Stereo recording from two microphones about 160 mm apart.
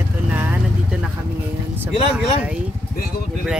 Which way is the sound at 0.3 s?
10° right (ahead or behind).